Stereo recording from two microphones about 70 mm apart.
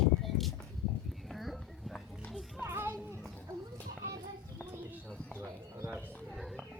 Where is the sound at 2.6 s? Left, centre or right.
Right.